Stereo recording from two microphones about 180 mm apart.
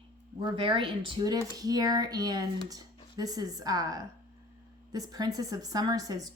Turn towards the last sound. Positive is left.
turn(degrees=-20)  # may be behind; listen again after turning